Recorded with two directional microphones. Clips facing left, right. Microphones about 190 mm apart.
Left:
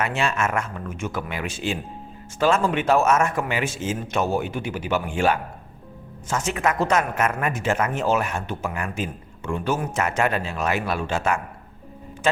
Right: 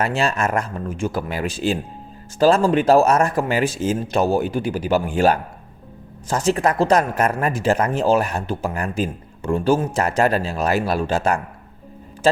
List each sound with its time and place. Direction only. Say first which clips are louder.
0.0 s speech: right 3 dB; 35° right (ahead or behind)